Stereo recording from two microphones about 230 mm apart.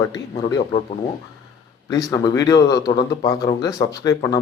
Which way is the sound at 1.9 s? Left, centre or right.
Centre.